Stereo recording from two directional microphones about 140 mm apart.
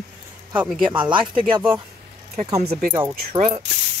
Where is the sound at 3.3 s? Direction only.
45° right (ahead or behind).